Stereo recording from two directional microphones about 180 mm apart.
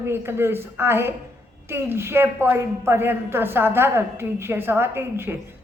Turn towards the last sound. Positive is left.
turn(degrees=-15)  # may be behind; listen again after turning